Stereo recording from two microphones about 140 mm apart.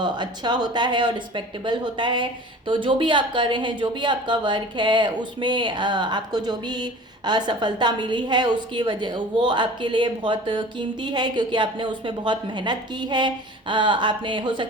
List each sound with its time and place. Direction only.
0.0 s speech: 30° right (ahead or behind)